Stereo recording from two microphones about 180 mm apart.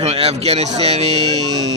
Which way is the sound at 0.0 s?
35° right (ahead or behind).